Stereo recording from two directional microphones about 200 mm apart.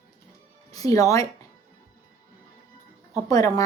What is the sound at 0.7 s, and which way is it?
Speech, 15° left (ahead or behind).